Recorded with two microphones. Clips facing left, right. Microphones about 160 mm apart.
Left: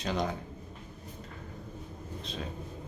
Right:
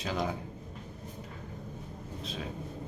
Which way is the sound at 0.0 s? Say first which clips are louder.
Left 1 dB; centre (ahead or behind).